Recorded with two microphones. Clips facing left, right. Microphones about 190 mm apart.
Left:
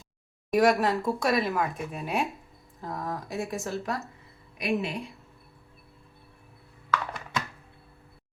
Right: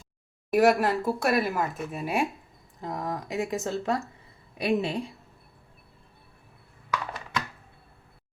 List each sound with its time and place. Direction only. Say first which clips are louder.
0.5 s speech: right 1 dB; 5° right (ahead or behind)
2.8 s a woman's voice: right 2 dB; 15° right (ahead or behind)